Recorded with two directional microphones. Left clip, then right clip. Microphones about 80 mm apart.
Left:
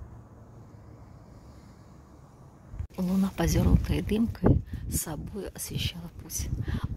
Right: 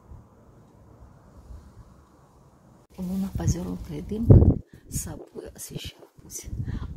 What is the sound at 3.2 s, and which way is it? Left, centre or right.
Speech, left.